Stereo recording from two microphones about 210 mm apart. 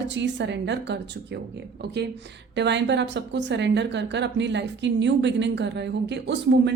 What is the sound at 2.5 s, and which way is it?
Speech, 55° right (ahead or behind).